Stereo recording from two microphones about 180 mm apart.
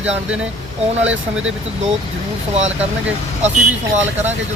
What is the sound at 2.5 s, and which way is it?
Speech, 40° right (ahead or behind).